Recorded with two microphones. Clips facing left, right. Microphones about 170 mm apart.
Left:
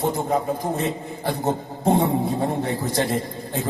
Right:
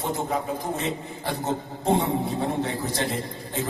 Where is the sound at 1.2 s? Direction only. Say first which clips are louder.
Left 4 dB; 50° left (ahead or behind).